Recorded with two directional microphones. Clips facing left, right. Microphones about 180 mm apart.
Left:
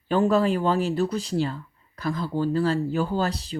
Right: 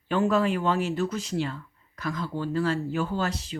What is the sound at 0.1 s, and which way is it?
Speech, 35° left (ahead or behind).